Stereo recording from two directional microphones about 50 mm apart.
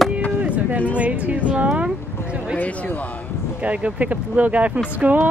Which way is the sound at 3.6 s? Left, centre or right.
Right.